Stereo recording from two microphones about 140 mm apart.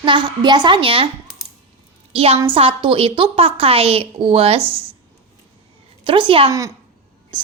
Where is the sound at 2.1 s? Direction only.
45° right (ahead or behind).